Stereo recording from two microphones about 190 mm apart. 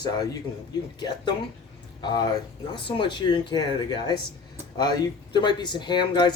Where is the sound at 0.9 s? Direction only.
20° left (ahead or behind).